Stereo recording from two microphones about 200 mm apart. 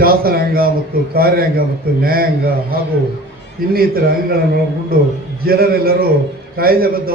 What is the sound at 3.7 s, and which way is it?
Speech, 50° right (ahead or behind).